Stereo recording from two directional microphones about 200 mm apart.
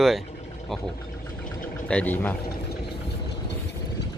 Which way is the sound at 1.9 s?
10° left (ahead or behind).